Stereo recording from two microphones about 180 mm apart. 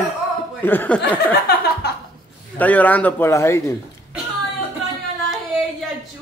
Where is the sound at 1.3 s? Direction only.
65° left (ahead or behind).